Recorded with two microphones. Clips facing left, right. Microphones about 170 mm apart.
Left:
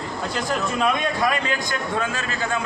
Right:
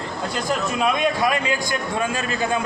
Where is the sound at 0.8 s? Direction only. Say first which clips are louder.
Right 2 dB; 10° right (ahead or behind).